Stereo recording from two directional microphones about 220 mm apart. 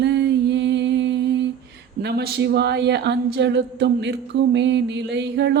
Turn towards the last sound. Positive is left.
turn(degrees=-50)  # may be behind; listen again after turning